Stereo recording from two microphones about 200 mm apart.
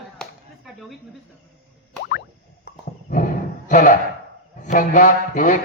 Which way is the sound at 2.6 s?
45° left (ahead or behind).